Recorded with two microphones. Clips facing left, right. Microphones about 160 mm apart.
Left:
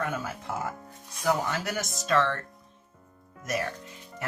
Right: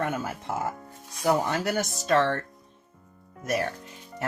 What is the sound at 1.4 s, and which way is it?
Speech, 35° right (ahead or behind).